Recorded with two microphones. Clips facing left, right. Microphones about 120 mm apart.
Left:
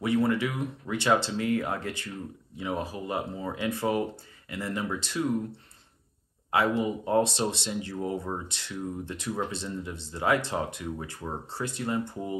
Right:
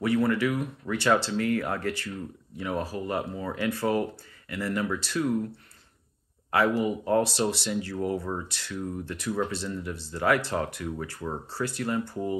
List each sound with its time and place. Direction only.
0.0 s speech: 20° left (ahead or behind)
6.5 s speech: 25° left (ahead or behind)